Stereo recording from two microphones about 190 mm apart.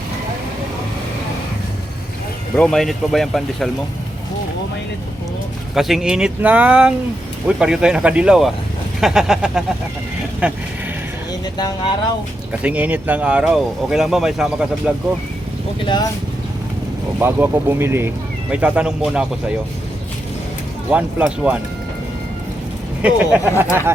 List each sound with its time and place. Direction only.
2.6 s speech: 5° left (ahead or behind)
5.7 s speech: centre (ahead or behind)
11.3 s a sound: 20° left (ahead or behind)
12.5 s speech: 5° right (ahead or behind)
17.2 s speech: 10° right (ahead or behind)
20.9 s speech: 5° right (ahead or behind)
23.0 s speech: 5° right (ahead or behind)